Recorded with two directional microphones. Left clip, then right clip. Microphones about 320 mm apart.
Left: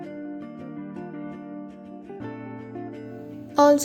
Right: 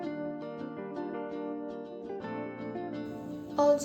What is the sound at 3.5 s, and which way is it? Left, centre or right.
Music, left.